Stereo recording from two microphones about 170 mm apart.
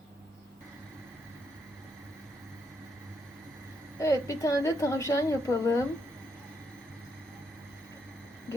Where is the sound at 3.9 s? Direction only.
20° left (ahead or behind).